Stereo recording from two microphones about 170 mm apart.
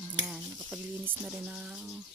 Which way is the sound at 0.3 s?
5° right (ahead or behind).